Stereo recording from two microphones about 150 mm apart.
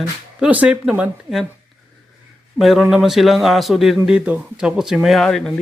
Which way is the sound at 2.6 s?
Centre (ahead or behind).